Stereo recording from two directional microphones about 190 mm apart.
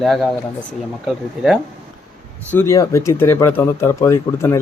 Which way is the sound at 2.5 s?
15° left (ahead or behind).